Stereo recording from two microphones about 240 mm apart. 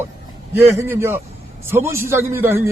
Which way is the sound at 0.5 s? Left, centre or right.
Centre.